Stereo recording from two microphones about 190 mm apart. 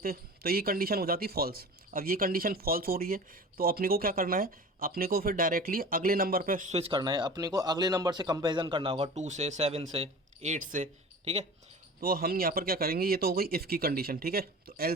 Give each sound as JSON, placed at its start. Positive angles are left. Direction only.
{"t": 0.0, "sound": "speech", "side_deg": -50}
{"t": 11.9, "sound": "speech", "side_deg": -50}